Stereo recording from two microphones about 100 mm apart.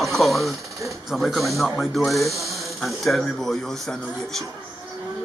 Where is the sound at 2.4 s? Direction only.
Centre (ahead or behind).